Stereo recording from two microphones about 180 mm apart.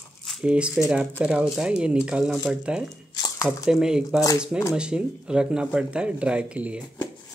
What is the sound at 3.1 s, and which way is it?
Squish, 20° left (ahead or behind).